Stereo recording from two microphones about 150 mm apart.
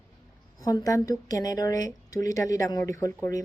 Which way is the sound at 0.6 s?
25° left (ahead or behind).